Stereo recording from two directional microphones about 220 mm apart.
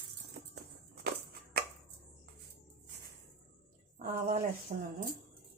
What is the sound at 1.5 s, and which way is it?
Chopping, 45° right (ahead or behind).